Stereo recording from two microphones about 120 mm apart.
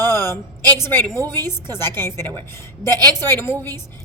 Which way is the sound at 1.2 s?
35° right (ahead or behind).